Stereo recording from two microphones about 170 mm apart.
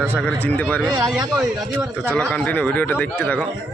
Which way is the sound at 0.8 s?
25° right (ahead or behind).